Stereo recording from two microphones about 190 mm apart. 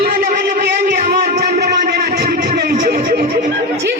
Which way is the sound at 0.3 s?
50° right (ahead or behind).